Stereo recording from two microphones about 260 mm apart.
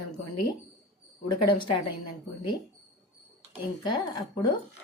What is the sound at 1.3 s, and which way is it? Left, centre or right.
Speech, centre.